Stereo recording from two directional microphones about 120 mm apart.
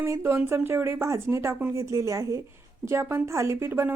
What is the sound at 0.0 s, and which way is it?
Speech, 20° right (ahead or behind).